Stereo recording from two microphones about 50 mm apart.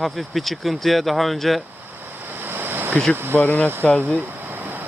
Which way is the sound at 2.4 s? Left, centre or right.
Right.